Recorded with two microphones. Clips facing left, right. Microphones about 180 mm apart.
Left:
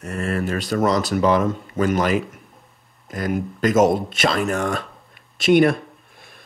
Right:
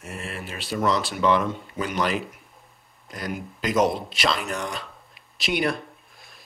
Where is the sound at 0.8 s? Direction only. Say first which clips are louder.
Left 3 dB; 40° left (ahead or behind).